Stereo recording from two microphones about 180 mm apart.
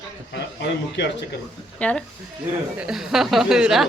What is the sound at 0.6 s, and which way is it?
Speech, 75° left (ahead or behind).